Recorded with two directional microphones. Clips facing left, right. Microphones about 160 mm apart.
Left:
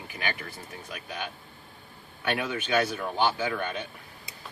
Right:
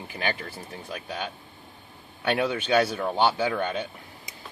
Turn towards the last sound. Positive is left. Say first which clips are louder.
# right 3 dB
turn(degrees=-30)  # may be behind; listen again after turning